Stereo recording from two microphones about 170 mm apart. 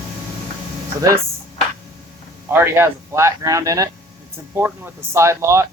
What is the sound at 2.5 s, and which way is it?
Speech, 15° right (ahead or behind).